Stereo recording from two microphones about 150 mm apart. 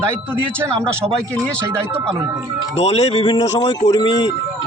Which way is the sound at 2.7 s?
45° left (ahead or behind).